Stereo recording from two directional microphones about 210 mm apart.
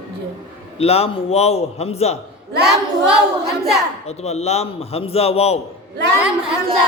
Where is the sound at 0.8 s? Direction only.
30° left (ahead or behind).